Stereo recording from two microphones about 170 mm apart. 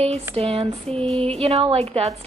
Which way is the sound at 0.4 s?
35° right (ahead or behind).